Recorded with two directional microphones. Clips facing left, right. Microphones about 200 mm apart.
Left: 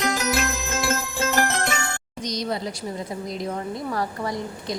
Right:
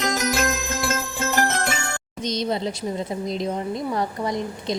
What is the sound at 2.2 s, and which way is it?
Speech, 25° right (ahead or behind).